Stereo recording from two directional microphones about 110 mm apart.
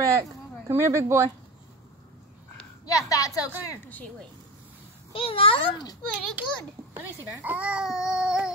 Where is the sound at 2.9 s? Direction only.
30° left (ahead or behind).